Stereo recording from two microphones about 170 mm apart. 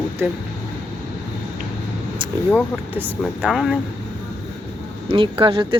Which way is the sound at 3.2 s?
Centre (ahead or behind).